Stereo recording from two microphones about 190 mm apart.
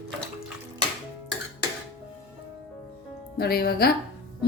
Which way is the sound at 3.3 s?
55° left (ahead or behind).